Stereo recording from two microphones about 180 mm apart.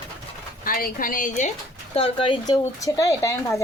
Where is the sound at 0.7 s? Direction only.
55° left (ahead or behind).